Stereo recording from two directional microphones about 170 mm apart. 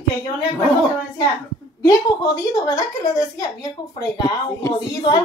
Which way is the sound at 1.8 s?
20° left (ahead or behind).